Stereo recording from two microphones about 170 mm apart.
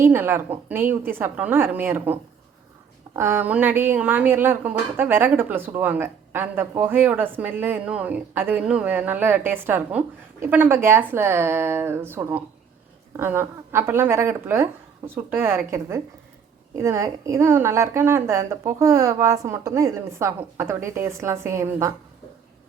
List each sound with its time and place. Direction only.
0.0 s speech: 15° right (ahead or behind)
3.2 s speech: 15° right (ahead or behind)